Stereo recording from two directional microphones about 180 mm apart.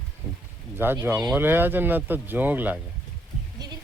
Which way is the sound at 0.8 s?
10° right (ahead or behind).